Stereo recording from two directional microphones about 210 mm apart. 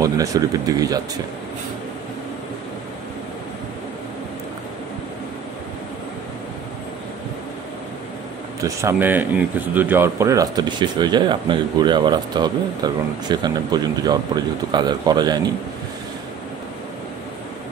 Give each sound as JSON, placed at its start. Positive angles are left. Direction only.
{"t": 0.0, "sound": "speech", "side_deg": -15}
{"t": 8.5, "sound": "speech", "side_deg": -15}